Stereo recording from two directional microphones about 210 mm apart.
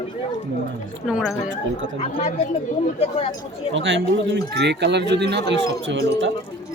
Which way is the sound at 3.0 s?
30° left (ahead or behind).